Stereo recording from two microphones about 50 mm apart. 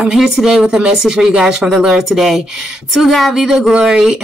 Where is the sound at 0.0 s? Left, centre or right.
Centre.